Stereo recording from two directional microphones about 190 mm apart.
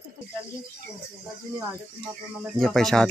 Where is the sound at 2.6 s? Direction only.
Centre (ahead or behind).